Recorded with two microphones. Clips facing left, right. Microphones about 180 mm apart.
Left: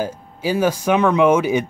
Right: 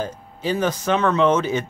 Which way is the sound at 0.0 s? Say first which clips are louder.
Left 3 dB; 10° left (ahead or behind).